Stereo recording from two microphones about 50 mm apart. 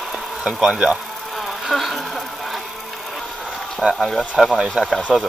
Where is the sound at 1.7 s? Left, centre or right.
Centre.